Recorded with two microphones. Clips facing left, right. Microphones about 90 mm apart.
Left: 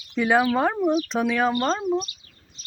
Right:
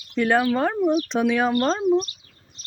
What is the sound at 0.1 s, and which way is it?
Speech, 5° left (ahead or behind).